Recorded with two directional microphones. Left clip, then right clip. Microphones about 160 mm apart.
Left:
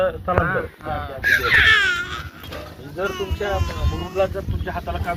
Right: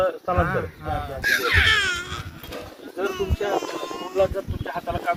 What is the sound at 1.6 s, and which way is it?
Baby cry, 90° right.